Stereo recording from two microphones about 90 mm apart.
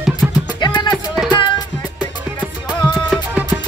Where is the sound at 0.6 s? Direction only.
55° left (ahead or behind).